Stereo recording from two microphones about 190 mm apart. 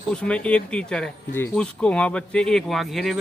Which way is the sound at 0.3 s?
5° left (ahead or behind).